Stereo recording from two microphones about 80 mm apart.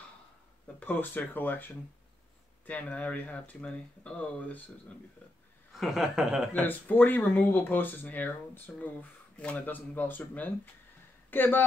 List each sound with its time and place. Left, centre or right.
0.7 s speech: left
5.7 s speech: centre
6.6 s speech: left